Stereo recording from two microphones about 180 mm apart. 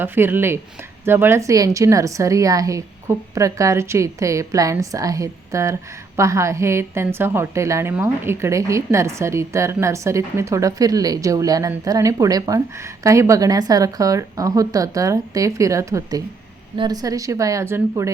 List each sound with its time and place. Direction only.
0.0 s a woman's voice: 10° right (ahead or behind)